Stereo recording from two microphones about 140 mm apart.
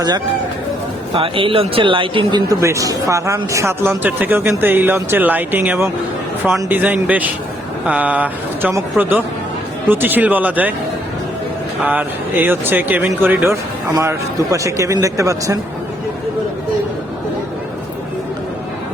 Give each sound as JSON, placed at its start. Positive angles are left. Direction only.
{"t": 1.1, "sound": "speech", "side_deg": -40}
{"t": 2.6, "sound": "speech", "side_deg": -20}
{"t": 11.9, "sound": "speech", "side_deg": -15}